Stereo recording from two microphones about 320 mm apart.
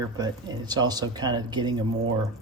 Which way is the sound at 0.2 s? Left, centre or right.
Centre.